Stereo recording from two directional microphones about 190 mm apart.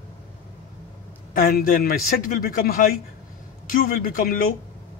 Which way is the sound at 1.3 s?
50° left (ahead or behind).